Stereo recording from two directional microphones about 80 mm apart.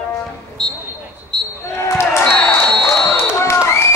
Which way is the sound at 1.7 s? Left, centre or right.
Left.